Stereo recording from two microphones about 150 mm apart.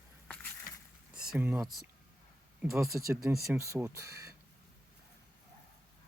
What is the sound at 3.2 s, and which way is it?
Speech, centre (ahead or behind).